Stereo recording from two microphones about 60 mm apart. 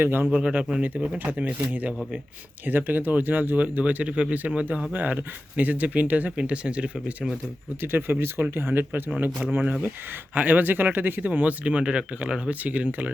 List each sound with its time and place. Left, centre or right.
0.0 s speech: right
0.3 s speech: right
1.2 s speech: right
7.8 s speech: right